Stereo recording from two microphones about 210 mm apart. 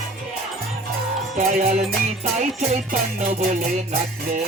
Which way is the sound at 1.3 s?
40° right (ahead or behind).